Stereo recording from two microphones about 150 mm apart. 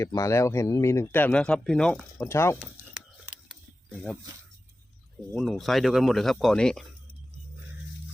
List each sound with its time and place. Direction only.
0.0 s speech: 20° left (ahead or behind); by 2.2 s 5° left (ahead or behind)
2.2 s speech: 15° left (ahead or behind)
2.9 s ratchet: 5° right (ahead or behind)
3.9 s speech: 5° left (ahead or behind)
5.3 s speech: centre (ahead or behind)